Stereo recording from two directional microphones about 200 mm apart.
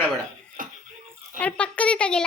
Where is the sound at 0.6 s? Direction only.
45° right (ahead or behind).